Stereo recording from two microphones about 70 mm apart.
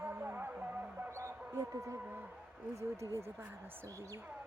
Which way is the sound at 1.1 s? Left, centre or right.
Right.